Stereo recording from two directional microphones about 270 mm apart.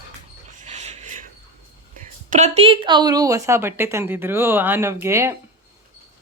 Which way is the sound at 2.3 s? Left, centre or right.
Right.